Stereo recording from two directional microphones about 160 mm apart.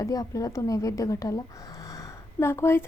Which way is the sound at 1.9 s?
20° left (ahead or behind).